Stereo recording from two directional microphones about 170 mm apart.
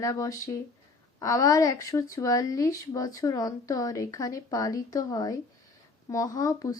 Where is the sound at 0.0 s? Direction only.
20° left (ahead or behind).